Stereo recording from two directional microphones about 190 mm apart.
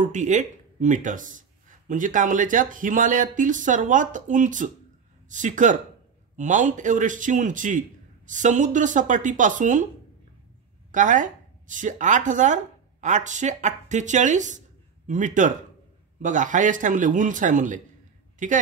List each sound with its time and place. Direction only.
0.0 s a man's voice: 40° right (ahead or behind)
10.9 s a man's voice: 40° right (ahead or behind)